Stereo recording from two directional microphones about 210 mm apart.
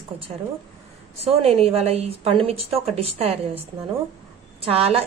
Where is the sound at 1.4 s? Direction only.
30° right (ahead or behind).